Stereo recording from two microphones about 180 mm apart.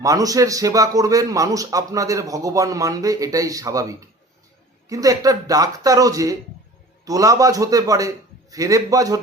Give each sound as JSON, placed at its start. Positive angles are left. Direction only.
{"t": 0.0, "sound": "a man's voice", "side_deg": -20}